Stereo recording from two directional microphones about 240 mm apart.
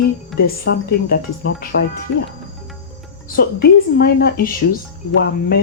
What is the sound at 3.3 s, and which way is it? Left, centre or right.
Speech, left.